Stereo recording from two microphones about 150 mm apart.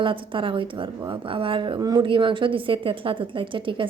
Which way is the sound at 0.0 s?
35° right (ahead or behind).